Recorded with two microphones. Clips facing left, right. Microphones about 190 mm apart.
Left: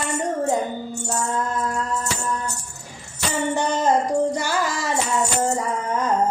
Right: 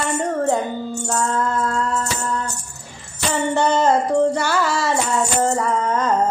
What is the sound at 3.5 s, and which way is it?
Music, 15° left (ahead or behind).